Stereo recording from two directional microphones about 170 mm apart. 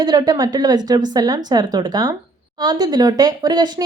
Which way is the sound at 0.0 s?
25° right (ahead or behind).